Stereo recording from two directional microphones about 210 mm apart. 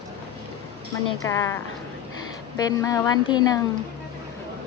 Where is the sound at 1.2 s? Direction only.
15° left (ahead or behind).